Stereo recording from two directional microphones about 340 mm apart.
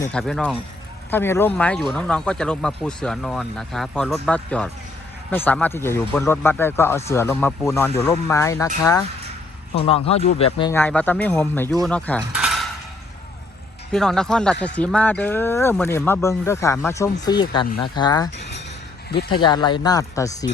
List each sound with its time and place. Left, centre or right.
0.0 s speech: centre
11.9 s cutlery: centre
13.9 s speech: centre
18.3 s a sound: left
19.3 s speech: centre